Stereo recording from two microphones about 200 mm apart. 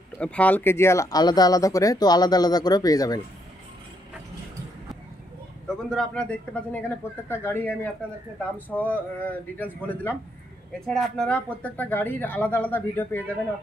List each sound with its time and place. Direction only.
0.2 s speech: 5° left (ahead or behind)
5.7 s a man's voice: 5° left (ahead or behind)